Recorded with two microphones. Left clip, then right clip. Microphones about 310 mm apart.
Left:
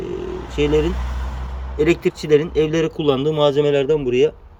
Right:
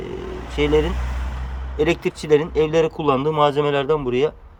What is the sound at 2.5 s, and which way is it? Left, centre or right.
A man's voice, right.